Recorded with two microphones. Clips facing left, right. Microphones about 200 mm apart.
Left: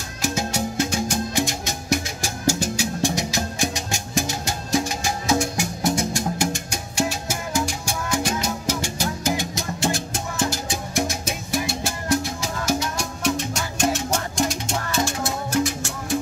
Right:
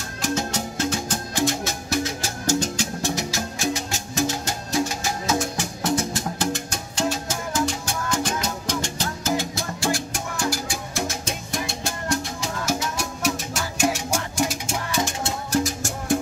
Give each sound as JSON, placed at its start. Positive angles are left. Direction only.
{"t": 0.2, "sound": "music", "side_deg": 10}
{"t": 5.6, "sound": "music", "side_deg": 10}
{"t": 11.5, "sound": "music", "side_deg": 5}
{"t": 15.5, "sound": "music", "side_deg": -40}